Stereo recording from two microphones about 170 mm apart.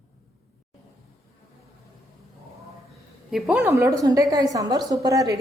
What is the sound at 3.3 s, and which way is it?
A woman's voice, centre (ahead or behind).